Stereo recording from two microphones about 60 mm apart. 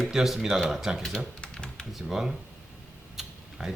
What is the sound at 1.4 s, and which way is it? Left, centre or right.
Typing, centre.